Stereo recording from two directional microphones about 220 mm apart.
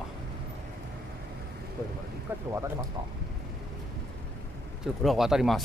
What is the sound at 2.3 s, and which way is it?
Speech, 10° right (ahead or behind).